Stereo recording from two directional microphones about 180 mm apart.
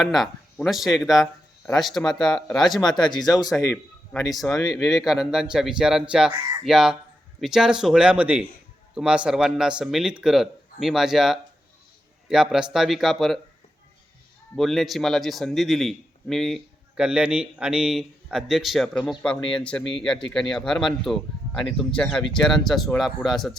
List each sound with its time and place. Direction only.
0.0 s speech: centre (ahead or behind)
2.8 s speech: 25° left (ahead or behind)
5.0 s speech: centre (ahead or behind)
14.5 s speech: centre (ahead or behind)